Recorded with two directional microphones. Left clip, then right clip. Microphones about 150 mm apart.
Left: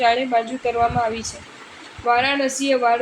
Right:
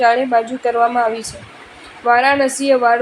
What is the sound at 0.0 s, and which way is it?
A woman's voice, 40° right (ahead or behind).